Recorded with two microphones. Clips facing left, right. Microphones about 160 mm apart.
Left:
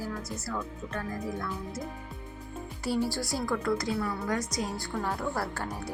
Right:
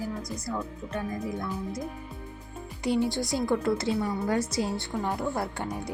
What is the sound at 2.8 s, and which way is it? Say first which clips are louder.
A woman's voice: right 3 dB; 20° right (ahead or behind).